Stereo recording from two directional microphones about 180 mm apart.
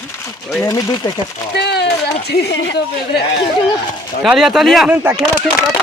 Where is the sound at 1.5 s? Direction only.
65° left (ahead or behind).